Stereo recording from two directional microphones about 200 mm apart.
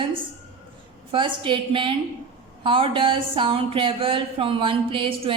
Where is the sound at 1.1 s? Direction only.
25° right (ahead or behind).